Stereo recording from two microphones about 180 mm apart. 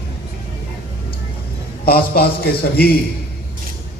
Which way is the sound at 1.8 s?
55° left (ahead or behind).